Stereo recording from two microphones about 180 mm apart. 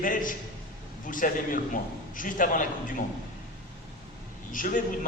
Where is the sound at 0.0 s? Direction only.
50° left (ahead or behind).